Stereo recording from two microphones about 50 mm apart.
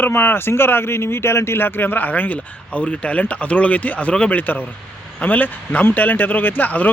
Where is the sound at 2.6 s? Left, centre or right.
Left.